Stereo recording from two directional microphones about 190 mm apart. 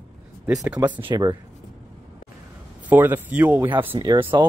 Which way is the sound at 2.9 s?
10° right (ahead or behind).